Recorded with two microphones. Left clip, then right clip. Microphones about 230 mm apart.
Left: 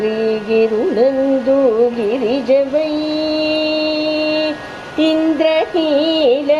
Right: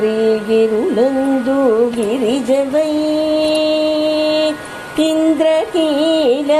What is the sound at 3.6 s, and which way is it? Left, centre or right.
Mantra, right.